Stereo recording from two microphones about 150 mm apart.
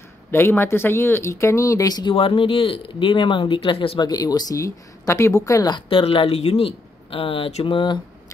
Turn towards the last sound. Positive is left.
turn(degrees=35)  # may be behind; listen again after turning